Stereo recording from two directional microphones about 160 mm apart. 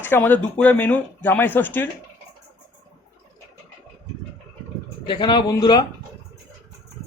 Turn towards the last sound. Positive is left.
turn(degrees=25)  # may be behind; listen again after turning